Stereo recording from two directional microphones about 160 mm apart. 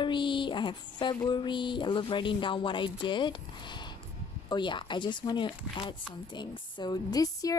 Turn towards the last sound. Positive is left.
turn(degrees=20)  # may be behind; listen again after turning